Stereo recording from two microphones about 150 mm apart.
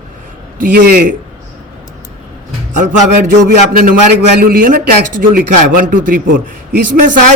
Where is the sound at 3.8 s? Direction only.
85° right.